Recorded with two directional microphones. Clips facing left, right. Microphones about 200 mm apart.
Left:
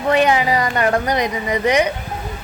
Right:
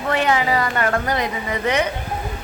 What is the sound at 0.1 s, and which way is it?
A woman's voice, 15° left (ahead or behind).